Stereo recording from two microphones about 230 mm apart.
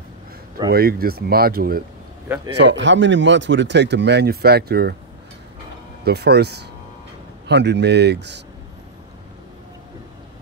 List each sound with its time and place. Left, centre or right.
0.7 s speech: right
2.2 s a man's voice: centre
2.6 s speech: right
6.0 s speech: right